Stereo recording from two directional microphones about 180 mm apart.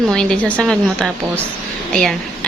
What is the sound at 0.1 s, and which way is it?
A woman's voice, 5° left (ahead or behind).